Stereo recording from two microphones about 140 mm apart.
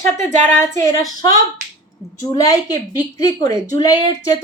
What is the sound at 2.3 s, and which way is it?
Speech, 25° left (ahead or behind).